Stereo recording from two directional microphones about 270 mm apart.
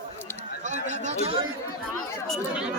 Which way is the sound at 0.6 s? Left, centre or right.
Right.